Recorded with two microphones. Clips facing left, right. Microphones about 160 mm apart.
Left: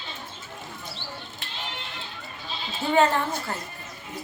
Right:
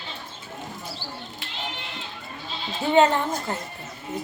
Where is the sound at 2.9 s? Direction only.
20° right (ahead or behind).